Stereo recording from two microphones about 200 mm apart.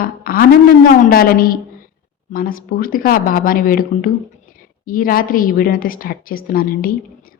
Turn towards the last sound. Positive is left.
turn(degrees=45)  # may be behind; listen again after turning